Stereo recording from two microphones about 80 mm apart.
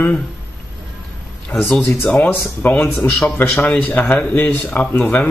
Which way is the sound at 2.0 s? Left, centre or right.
Left.